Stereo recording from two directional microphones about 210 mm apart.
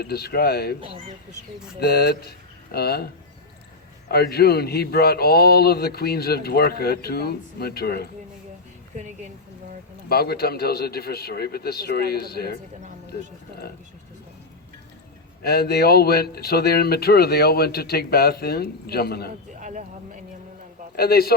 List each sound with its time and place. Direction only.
0.0 s speech: 50° left (ahead or behind)
0.8 s speech: 25° right (ahead or behind)
1.8 s speech: 50° left (ahead or behind)
4.1 s speech: 50° left (ahead or behind)
10.1 s speech: 45° left (ahead or behind)
15.4 s speech: 50° left (ahead or behind)
19.5 s a sound: 35° right (ahead or behind)
20.9 s speech: 50° left (ahead or behind)